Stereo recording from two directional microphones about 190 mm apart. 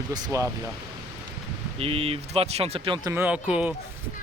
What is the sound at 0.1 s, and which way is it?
Speech, 20° right (ahead or behind).